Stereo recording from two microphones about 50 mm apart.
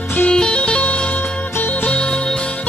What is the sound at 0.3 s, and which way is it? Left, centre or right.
Music, centre.